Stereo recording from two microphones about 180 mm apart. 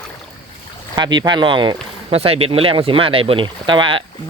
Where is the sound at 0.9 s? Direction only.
25° right (ahead or behind).